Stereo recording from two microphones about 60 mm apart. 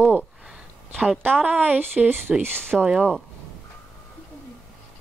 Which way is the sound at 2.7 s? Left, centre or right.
Centre.